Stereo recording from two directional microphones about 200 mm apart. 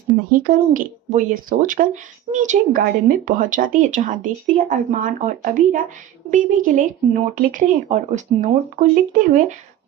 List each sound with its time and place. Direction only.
0.3 s speech: 45° right (ahead or behind)